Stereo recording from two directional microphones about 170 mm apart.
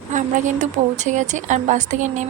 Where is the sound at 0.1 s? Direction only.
45° right (ahead or behind).